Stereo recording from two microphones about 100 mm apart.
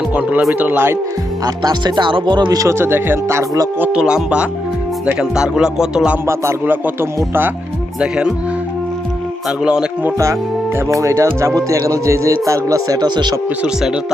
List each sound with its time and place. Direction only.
0.1 s speech: 15° right (ahead or behind)
0.6 s music: 20° right (ahead or behind)
1.5 s speech: 45° right (ahead or behind)
2.6 s music: 25° right (ahead or behind)
3.9 s music: 10° right (ahead or behind)
6.2 s music: 25° right (ahead or behind)
7.9 s music: 10° right (ahead or behind)
9.5 s music: 5° right (ahead or behind)
10.8 s music: 30° right (ahead or behind)
11.3 s speech: 30° right (ahead or behind); by 13.3 s 45° right (ahead or behind)
13.6 s music: 10° right (ahead or behind)